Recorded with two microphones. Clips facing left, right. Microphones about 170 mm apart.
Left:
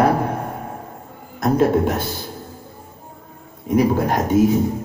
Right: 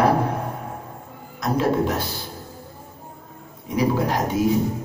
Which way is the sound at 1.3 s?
50° left (ahead or behind).